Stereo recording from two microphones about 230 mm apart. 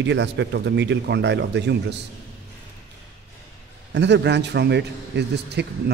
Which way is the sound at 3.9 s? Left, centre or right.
Right.